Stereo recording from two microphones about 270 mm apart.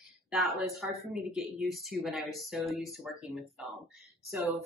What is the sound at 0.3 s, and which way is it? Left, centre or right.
Speech, centre.